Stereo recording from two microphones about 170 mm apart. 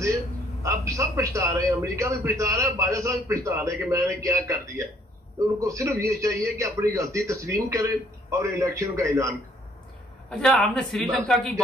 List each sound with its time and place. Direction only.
0.7 s a man's voice: 15° right (ahead or behind)
10.3 s speech: 5° left (ahead or behind)